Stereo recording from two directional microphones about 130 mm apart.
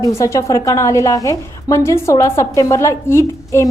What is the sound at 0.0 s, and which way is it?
A woman's voice, 25° left (ahead or behind).